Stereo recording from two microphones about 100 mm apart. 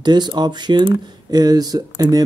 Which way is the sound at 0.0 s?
45° right (ahead or behind).